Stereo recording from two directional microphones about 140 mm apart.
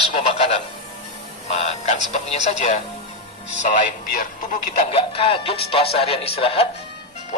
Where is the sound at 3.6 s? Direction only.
65° left (ahead or behind).